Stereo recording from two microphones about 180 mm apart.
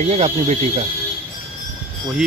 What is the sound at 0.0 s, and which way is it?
Speech, 40° right (ahead or behind).